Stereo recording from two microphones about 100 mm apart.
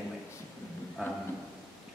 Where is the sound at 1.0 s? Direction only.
5° right (ahead or behind).